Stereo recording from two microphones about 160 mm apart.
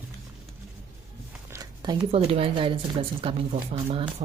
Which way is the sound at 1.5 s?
25° right (ahead or behind).